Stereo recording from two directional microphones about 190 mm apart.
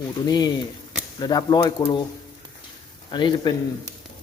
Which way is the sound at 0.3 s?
20° left (ahead or behind).